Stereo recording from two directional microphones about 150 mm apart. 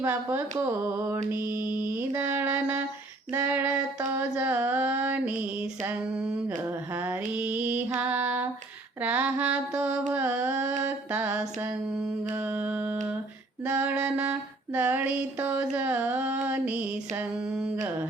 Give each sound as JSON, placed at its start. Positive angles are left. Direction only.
{"t": 0.0, "sound": "female singing", "side_deg": -15}
{"t": 10.1, "sound": "mantra", "side_deg": -10}
{"t": 13.7, "sound": "female singing", "side_deg": -10}